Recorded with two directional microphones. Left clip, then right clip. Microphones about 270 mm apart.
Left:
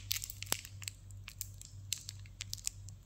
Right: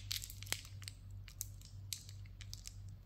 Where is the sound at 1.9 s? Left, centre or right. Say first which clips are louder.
Left 6 dB; centre.